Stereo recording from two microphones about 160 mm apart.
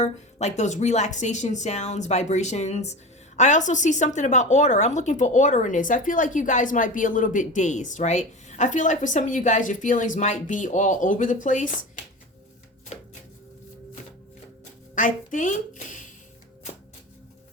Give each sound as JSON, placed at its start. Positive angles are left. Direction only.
{"t": 0.0, "sound": "speech", "side_deg": 45}
{"t": 12.9, "sound": "a sound", "side_deg": 45}
{"t": 14.9, "sound": "speech", "side_deg": 55}